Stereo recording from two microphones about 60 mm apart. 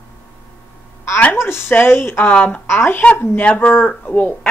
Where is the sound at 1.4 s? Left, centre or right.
Left.